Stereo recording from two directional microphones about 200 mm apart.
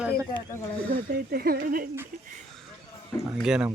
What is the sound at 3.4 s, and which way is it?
Speech, 5° right (ahead or behind).